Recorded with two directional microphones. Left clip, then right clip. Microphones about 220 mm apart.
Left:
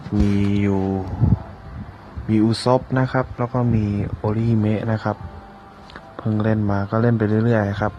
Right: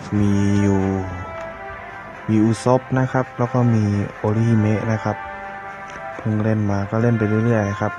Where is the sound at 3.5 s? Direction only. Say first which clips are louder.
Right 2 dB; 15° right (ahead or behind).